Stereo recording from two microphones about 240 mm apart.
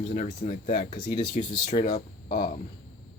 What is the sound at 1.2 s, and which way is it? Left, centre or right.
Speech, centre.